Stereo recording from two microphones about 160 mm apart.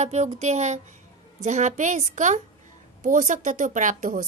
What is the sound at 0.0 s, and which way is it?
Speech, 45° right (ahead or behind).